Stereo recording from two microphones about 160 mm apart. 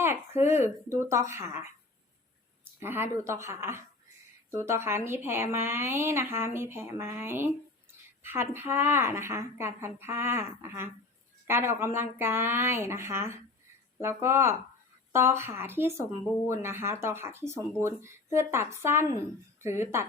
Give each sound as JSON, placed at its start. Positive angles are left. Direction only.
{"t": 0.0, "sound": "a sound", "side_deg": -15}
{"t": 0.9, "sound": "a woman's voice", "side_deg": -15}
{"t": 2.8, "sound": "a woman's voice", "side_deg": -15}